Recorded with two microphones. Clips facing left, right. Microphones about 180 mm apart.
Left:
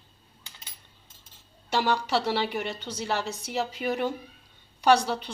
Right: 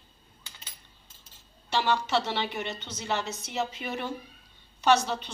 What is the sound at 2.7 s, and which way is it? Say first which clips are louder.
Speech: left 4 dB; 35° left (ahead or behind).